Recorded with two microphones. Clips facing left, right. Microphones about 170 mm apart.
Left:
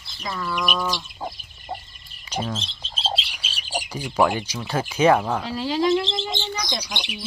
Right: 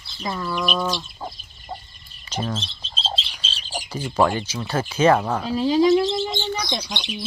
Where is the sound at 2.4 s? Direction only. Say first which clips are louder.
Right 1 dB; 10° left (ahead or behind).